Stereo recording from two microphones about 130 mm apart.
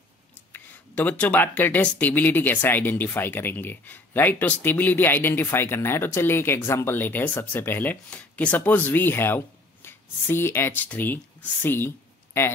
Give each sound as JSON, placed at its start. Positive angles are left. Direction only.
{"t": 0.5, "sound": "speech", "side_deg": 15}